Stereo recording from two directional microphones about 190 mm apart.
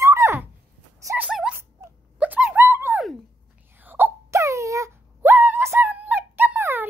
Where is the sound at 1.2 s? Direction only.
5° right (ahead or behind).